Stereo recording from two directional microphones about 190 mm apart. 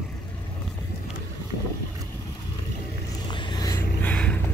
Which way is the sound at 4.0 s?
10° left (ahead or behind).